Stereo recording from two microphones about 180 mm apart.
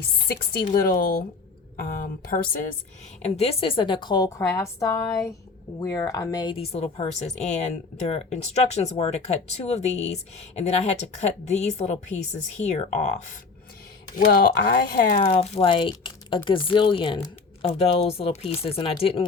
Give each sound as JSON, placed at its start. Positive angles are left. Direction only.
{"t": 0.3, "sound": "speech", "side_deg": 55}
{"t": 3.2, "sound": "a woman's voice", "side_deg": 35}
{"t": 14.2, "sound": "speech", "side_deg": 60}
{"t": 15.4, "sound": "a woman's voice", "side_deg": 30}